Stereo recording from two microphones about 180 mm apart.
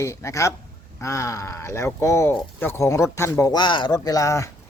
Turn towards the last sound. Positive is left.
turn(degrees=15)  # may be behind; listen again after turning